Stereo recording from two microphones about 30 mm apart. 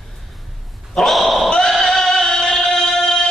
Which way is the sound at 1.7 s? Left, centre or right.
Centre.